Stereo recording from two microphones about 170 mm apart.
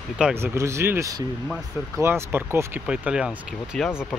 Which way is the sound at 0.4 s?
15° right (ahead or behind).